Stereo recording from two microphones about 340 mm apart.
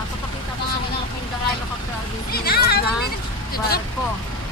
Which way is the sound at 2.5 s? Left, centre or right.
Left.